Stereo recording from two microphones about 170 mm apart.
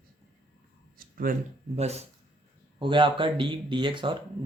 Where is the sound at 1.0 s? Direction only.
55° right (ahead or behind).